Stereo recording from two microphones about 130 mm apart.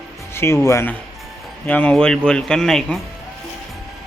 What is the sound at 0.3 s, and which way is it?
Speech, 20° left (ahead or behind).